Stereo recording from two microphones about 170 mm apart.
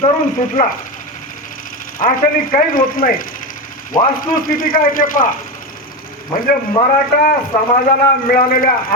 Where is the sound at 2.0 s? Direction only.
55° left (ahead or behind).